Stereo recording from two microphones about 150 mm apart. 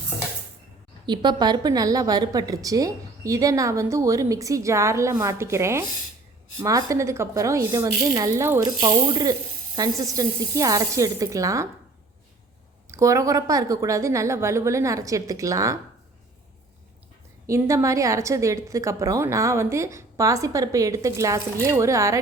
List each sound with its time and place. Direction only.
1.0 s a woman's voice: 30° right (ahead or behind)
12.9 s a woman's voice: 20° right (ahead or behind)
17.4 s a woman's voice: 20° right (ahead or behind)